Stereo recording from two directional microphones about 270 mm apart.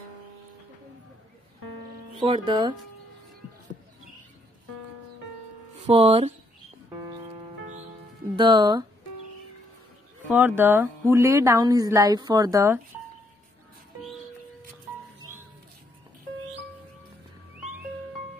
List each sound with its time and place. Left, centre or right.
2.1 s speech: centre
5.9 s speech: right
8.4 s speech: centre
10.3 s speech: centre